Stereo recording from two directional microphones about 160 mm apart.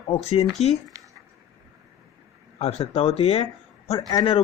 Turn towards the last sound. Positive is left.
turn(degrees=30)  # may be behind; listen again after turning